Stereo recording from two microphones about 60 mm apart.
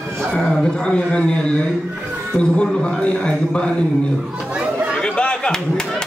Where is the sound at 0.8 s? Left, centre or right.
Centre.